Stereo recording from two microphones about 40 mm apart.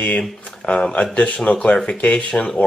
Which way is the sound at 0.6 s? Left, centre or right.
Left.